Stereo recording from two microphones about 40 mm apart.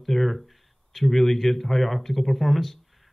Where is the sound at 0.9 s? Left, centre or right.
Centre.